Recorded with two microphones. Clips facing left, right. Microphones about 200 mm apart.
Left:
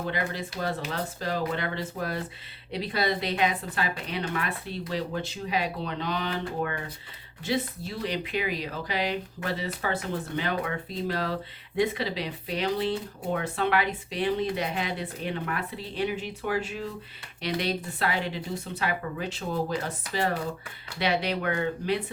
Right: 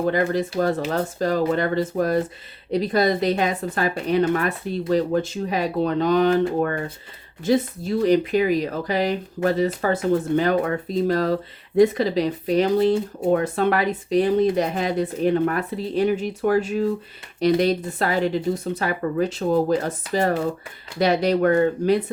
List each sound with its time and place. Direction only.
0.0 s speech: 45° right (ahead or behind)
21.0 s speech: 40° right (ahead or behind)